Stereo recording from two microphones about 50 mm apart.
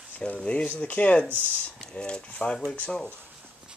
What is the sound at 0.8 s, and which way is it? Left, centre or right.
Speech, left.